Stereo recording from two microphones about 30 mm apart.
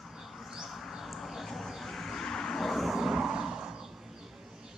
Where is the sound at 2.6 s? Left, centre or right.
Centre.